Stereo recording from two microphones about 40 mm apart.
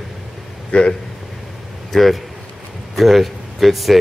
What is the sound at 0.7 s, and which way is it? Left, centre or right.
Speech, left.